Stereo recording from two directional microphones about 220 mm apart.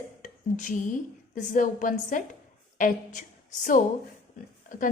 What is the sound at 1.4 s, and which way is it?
A woman's voice, 35° left (ahead or behind).